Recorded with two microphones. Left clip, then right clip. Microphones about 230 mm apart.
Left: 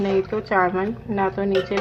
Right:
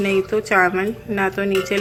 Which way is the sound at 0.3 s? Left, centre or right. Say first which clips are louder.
Right 4 dB; right.